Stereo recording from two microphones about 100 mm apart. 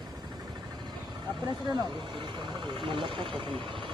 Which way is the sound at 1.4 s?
45° right (ahead or behind).